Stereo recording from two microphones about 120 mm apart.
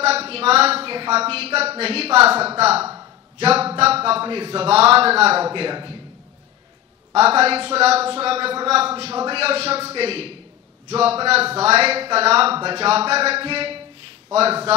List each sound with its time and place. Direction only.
0.0 s a man's voice: 55° right (ahead or behind)
2.8 s a sound: 20° right (ahead or behind)
3.3 s a man's voice: 55° right (ahead or behind)
7.2 s a man's voice: 55° right (ahead or behind)